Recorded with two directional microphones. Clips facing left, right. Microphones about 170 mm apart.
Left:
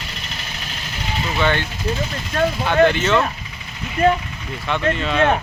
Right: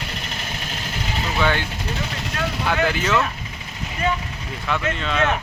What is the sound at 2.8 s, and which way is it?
Speech, 5° right (ahead or behind).